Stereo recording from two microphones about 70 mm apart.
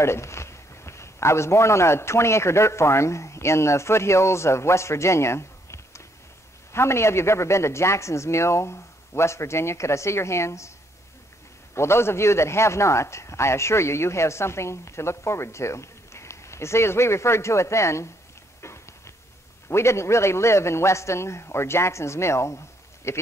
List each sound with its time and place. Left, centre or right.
0.0 s a man's voice: left
11.7 s speech: left
18.6 s a sound: left
19.7 s speech: left